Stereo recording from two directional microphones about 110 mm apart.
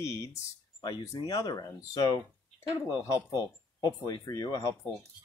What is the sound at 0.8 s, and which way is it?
Speech, 40° left (ahead or behind).